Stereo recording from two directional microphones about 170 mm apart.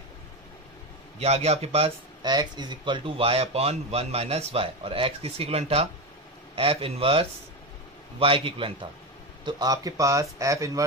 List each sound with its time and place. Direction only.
1.2 s speech: 35° right (ahead or behind)
2.2 s speech: 25° right (ahead or behind)